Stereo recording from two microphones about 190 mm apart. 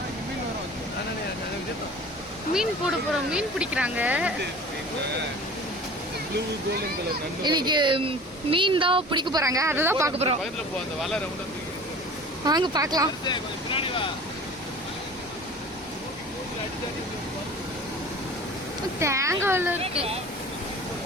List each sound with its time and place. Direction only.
2.5 s speech: 5° right (ahead or behind)
7.4 s speech: 25° right (ahead or behind)
12.5 s speech: 20° right (ahead or behind)
13.2 s vehicle: 25° left (ahead or behind)
18.9 s speech: 15° right (ahead or behind)
19.8 s speech: 30° right (ahead or behind)